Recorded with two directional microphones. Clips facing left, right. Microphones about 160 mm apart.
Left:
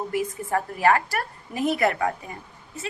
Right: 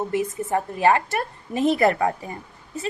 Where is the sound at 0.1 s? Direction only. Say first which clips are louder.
Right 2 dB; 20° right (ahead or behind).